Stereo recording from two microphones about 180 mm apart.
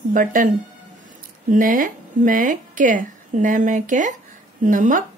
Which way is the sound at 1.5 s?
50° right (ahead or behind).